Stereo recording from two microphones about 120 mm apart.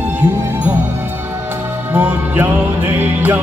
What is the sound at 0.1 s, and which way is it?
Music, 15° right (ahead or behind).